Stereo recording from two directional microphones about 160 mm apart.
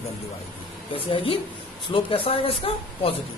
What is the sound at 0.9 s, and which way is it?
Speech, 35° left (ahead or behind).